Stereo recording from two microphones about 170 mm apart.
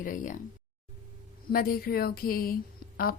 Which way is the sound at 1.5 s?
60° left (ahead or behind).